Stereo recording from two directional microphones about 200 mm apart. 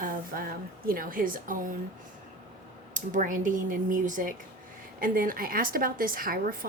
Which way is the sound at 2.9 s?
40° right (ahead or behind).